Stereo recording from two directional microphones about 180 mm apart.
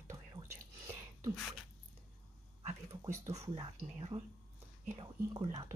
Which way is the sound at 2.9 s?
15° right (ahead or behind).